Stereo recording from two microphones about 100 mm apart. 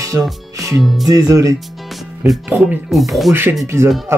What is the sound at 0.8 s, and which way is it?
Speech, centre (ahead or behind).